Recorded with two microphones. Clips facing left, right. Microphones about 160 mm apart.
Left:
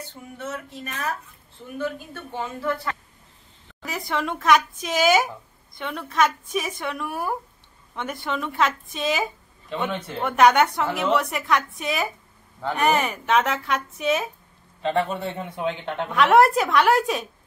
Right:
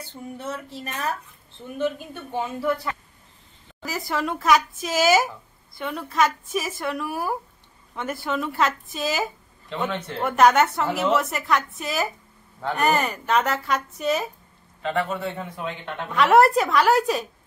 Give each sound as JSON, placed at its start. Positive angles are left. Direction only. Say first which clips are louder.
{"t": 0.4, "sound": "speech", "louder": "left 1 dB", "side_deg": -30}
{"t": 2.3, "sound": "speech", "louder": "right 3 dB", "side_deg": -15}
{"t": 3.8, "sound": "a woman's voice", "louder": "even", "side_deg": 0}
{"t": 14.8, "sound": "a man's voice", "louder": "left 2 dB", "side_deg": 30}
{"t": 16.1, "sound": "a woman's voice", "louder": "even", "side_deg": 0}